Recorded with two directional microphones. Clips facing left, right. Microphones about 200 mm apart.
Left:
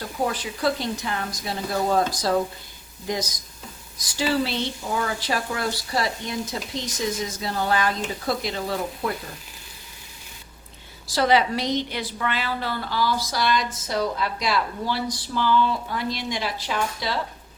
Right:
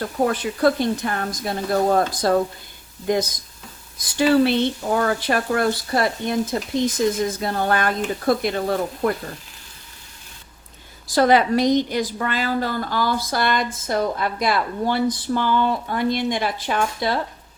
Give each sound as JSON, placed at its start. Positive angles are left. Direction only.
{"t": 0.3, "sound": "a woman's voice", "side_deg": -55}
{"t": 11.1, "sound": "a woman's voice", "side_deg": -50}